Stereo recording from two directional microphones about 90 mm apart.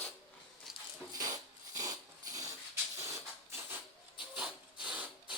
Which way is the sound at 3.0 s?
30° right (ahead or behind).